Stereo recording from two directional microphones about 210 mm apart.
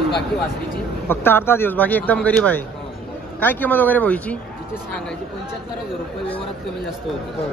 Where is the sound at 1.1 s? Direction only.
10° left (ahead or behind).